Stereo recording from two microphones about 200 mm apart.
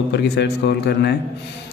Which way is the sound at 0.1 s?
55° left (ahead or behind).